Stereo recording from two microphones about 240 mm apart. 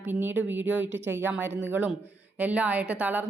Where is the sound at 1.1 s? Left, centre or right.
Centre.